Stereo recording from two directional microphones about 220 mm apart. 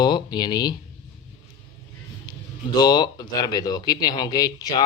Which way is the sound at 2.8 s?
20° left (ahead or behind).